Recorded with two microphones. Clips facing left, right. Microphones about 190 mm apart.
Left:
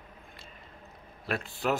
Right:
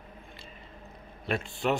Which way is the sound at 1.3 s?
Centre (ahead or behind).